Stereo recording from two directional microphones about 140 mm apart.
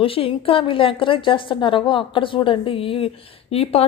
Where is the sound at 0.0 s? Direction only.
40° left (ahead or behind).